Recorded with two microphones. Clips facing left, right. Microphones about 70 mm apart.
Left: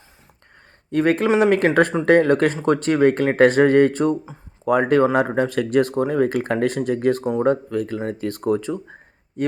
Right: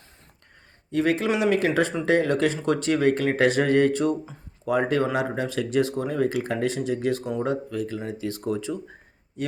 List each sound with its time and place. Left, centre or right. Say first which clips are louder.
0.9 s speech: left 5 dB; left
4.6 s speech: left 6 dB; left